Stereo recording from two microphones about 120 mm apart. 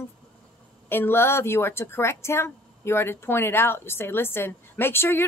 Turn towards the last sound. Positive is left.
turn(degrees=20)  # may be behind; listen again after turning